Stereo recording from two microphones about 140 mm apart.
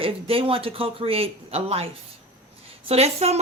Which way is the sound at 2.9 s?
50° right (ahead or behind).